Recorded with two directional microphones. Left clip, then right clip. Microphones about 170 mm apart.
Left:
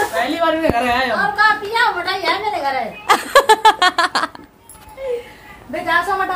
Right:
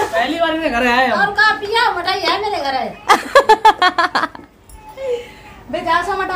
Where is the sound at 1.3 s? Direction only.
15° right (ahead or behind).